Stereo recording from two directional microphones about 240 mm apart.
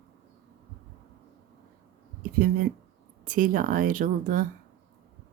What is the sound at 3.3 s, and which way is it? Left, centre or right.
Speech, right.